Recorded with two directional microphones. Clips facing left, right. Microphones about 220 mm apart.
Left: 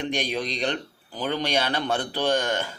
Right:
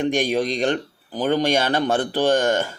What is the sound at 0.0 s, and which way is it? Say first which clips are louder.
A man's voice: right 7 dB; 45° right (ahead or behind).